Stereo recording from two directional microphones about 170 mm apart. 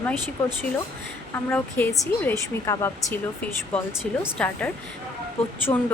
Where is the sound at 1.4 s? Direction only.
10° left (ahead or behind).